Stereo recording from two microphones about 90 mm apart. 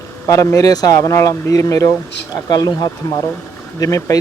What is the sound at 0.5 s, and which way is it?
Speech, 45° left (ahead or behind).